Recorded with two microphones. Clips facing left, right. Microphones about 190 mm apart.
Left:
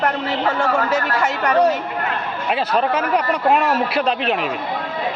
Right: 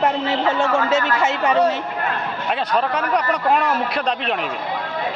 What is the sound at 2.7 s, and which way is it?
Speech, 5° left (ahead or behind).